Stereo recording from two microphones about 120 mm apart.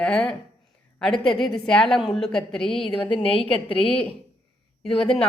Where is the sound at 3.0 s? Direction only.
50° left (ahead or behind).